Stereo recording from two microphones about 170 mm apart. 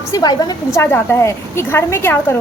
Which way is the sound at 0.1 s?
25° left (ahead or behind).